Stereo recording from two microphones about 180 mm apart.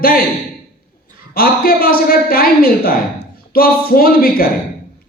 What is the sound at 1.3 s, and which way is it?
Speech, 55° left (ahead or behind).